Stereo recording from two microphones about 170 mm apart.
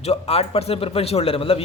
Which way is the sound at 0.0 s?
35° left (ahead or behind).